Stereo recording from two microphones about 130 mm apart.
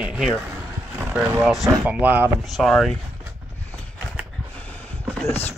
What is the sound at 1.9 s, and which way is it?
Speech, 10° right (ahead or behind).